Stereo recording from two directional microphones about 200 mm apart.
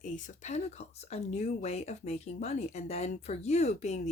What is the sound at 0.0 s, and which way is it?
Speech, 35° left (ahead or behind).